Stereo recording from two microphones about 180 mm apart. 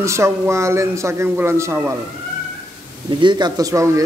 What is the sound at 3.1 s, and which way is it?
Speech, 25° right (ahead or behind).